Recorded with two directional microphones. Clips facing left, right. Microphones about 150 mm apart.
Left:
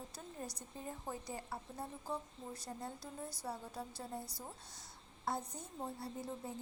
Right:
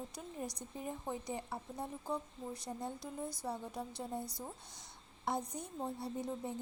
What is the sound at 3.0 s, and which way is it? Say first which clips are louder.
Speech: right 4 dB; 10° left (ahead or behind).